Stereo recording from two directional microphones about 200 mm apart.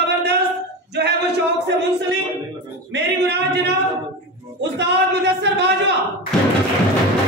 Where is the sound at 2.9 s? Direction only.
55° right (ahead or behind).